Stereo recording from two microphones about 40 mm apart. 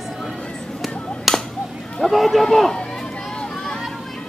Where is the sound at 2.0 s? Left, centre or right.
Centre.